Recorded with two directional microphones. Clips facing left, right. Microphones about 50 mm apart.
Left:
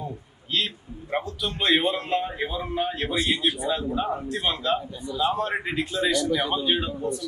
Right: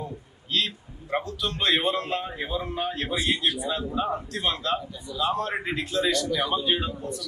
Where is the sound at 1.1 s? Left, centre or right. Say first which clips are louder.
Even; centre.